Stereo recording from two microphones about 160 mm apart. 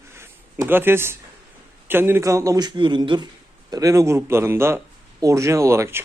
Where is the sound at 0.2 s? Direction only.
15° right (ahead or behind).